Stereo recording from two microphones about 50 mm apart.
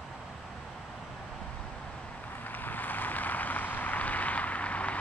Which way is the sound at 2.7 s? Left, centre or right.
Left.